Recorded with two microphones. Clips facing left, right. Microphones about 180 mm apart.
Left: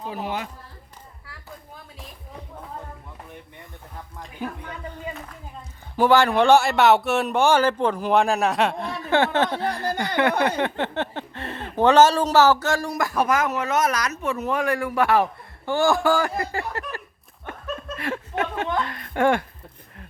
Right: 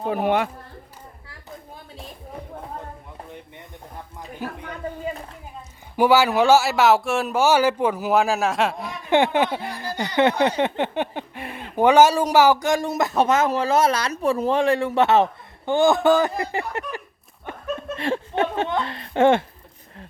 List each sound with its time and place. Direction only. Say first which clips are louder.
0.0 s speech: right 8 dB; 60° right (ahead or behind)
4.4 s speech: left 1 dB; 5° right (ahead or behind)
6.0 s speech: even; 5° right (ahead or behind)
8.9 s speech: right 2 dB; 15° right (ahead or behind)